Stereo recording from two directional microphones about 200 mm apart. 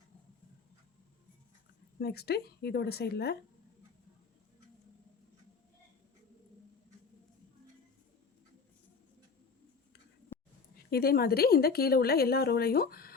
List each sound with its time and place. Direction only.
2.0 s a woman's voice: 50° left (ahead or behind)
10.9 s a woman's voice: 50° left (ahead or behind)